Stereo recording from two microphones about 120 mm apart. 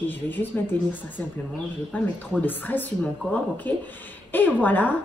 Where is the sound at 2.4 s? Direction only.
15° left (ahead or behind).